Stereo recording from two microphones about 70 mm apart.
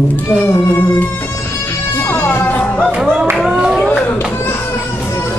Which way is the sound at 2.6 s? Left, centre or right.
Centre.